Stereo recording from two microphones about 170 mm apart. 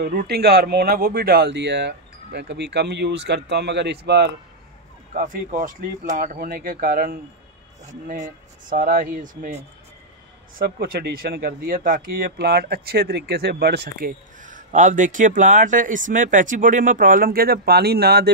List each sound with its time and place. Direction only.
0.0 s speech: 65° right (ahead or behind)
5.1 s speech: 50° right (ahead or behind)
10.5 s speech: 60° right (ahead or behind)